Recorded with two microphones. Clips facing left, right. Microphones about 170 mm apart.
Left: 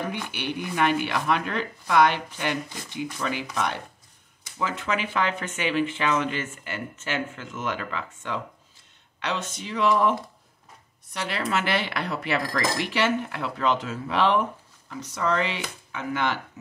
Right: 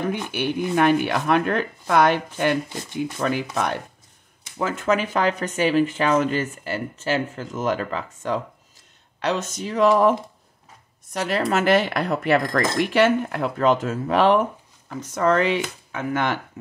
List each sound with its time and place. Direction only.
0.3 s speech: 45° right (ahead or behind)
11.1 s speech: 45° right (ahead or behind)